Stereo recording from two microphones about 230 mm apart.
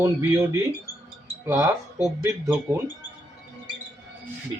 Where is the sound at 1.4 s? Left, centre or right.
Centre.